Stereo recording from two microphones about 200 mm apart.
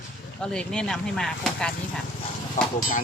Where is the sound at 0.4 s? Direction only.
5° left (ahead or behind).